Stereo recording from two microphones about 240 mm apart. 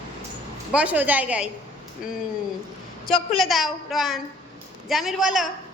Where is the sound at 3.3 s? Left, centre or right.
Centre.